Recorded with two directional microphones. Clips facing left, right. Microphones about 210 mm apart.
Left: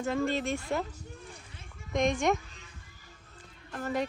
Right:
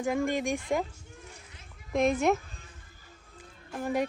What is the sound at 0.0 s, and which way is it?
Speech, 15° right (ahead or behind).